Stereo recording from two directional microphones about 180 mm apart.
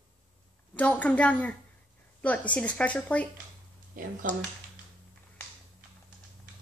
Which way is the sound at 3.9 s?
50° right (ahead or behind).